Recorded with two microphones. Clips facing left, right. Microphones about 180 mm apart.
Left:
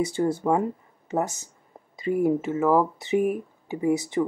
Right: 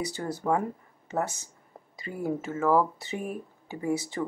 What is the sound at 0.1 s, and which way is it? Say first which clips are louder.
Speech: left 5 dB; 25° left (ahead or behind).